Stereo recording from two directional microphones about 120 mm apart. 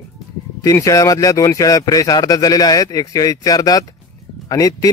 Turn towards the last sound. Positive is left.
turn(degrees=30)  # may be behind; listen again after turning